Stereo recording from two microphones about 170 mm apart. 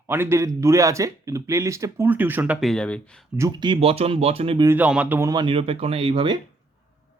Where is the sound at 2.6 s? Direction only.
5° left (ahead or behind).